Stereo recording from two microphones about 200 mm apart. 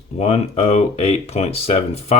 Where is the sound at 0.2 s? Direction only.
30° left (ahead or behind).